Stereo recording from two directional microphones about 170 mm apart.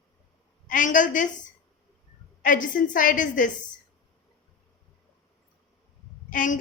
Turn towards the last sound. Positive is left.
turn(degrees=50)  # may be behind; listen again after turning